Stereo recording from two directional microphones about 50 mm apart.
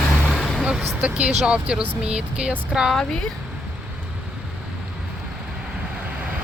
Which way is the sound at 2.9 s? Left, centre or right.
Centre.